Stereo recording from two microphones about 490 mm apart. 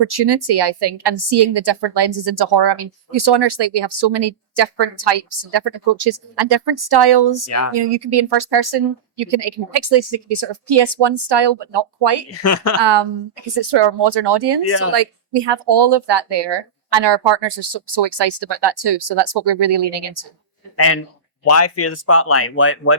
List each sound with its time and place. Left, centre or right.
0.1 s speech: right
12.3 s speech: left
12.8 s a woman's voice: right
20.7 s speech: left